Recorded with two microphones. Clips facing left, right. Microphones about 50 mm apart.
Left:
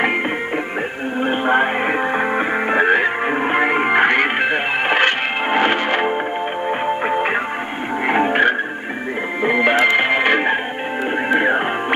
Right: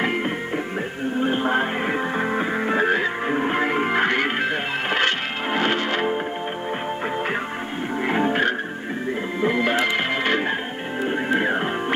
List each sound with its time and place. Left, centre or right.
1.2 s music: left